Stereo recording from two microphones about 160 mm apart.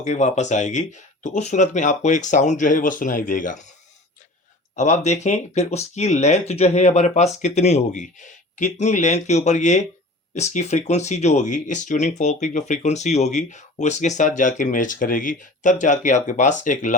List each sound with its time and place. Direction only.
0.0 s speech: 45° left (ahead or behind)
4.7 s speech: 45° left (ahead or behind)